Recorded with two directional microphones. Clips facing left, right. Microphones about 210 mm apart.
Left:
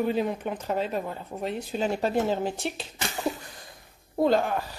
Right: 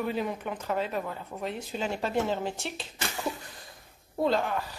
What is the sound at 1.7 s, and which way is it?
Speech, 40° left (ahead or behind).